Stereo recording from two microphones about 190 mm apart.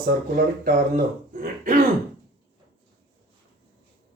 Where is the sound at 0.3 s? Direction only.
50° right (ahead or behind).